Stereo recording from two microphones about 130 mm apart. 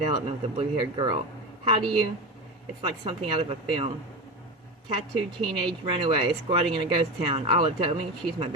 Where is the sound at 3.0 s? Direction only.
45° right (ahead or behind).